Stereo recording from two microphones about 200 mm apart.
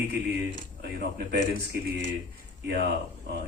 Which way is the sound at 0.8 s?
55° right (ahead or behind).